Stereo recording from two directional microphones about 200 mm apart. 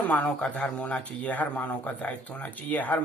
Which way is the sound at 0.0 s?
10° left (ahead or behind).